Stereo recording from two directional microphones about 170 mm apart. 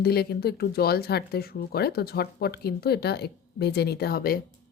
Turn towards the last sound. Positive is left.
turn(degrees=60)  # may be behind; listen again after turning